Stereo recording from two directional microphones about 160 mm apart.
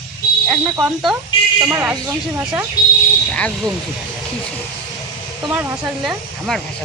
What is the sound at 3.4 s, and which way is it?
Speech, 5° left (ahead or behind).